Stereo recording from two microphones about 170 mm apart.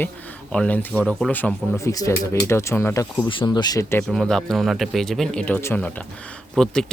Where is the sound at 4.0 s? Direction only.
5° left (ahead or behind).